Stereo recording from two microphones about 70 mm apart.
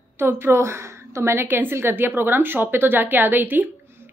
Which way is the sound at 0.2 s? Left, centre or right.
Right.